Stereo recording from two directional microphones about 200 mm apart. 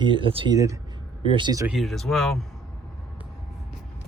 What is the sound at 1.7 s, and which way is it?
Speech, centre (ahead or behind).